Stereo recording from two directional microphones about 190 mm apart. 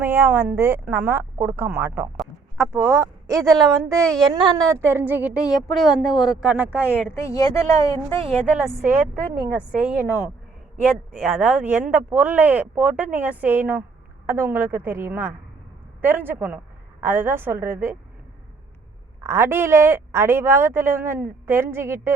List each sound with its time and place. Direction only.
0.0 s speech: 10° right (ahead or behind)
4.0 s speech: centre (ahead or behind)
4.3 s speech: 25° right (ahead or behind)
7.2 s speech: 15° left (ahead or behind)
8.3 s speech: 5° right (ahead or behind)
19.2 s speech: 15° right (ahead or behind)